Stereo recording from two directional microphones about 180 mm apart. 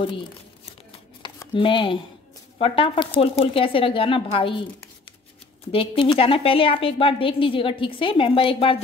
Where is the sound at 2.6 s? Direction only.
30° left (ahead or behind).